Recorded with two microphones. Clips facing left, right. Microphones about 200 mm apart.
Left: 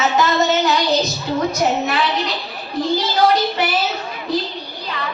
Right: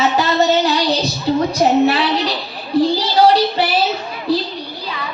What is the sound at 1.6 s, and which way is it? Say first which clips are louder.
Speech: right 5 dB; 30° right (ahead or behind).